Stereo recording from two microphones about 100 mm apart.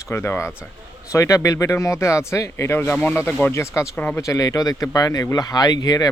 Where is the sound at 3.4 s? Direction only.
25° left (ahead or behind).